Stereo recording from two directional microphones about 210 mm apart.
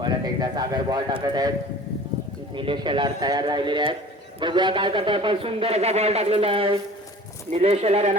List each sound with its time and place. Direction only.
0.0 s speech: 20° right (ahead or behind)
2.6 s speech: 25° right (ahead or behind)